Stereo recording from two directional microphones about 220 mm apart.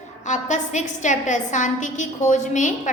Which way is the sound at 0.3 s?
35° left (ahead or behind).